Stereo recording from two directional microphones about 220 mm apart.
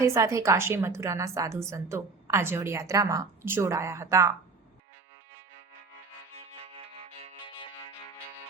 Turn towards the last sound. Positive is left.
turn(degrees=-30)  # may be behind; listen again after turning